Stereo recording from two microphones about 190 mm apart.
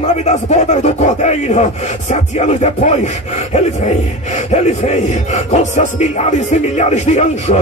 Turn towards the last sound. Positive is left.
turn(degrees=35)  # may be behind; listen again after turning